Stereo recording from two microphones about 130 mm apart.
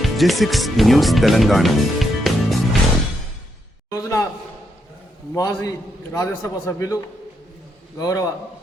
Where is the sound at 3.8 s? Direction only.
25° left (ahead or behind).